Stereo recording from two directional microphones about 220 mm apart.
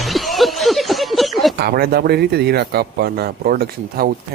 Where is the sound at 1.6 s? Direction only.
45° right (ahead or behind).